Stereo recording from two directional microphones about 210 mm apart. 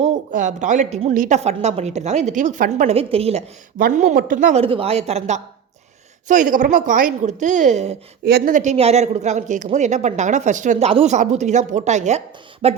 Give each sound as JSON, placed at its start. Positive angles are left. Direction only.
{"t": 0.0, "sound": "speech", "side_deg": -35}
{"t": 3.8, "sound": "speech", "side_deg": -40}
{"t": 4.6, "sound": "speech", "side_deg": -25}
{"t": 8.2, "sound": "speech", "side_deg": -50}